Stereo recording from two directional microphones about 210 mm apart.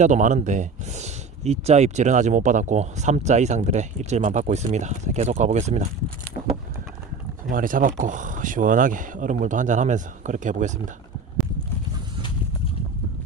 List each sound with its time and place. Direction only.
0.0 s speech: 35° right (ahead or behind)
7.5 s speech: 40° right (ahead or behind)